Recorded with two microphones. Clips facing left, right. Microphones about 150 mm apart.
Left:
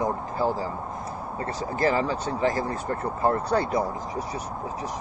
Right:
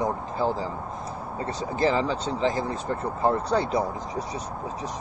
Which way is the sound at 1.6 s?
20° right (ahead or behind).